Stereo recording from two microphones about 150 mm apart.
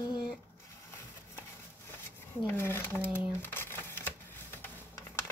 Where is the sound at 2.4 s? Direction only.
15° left (ahead or behind).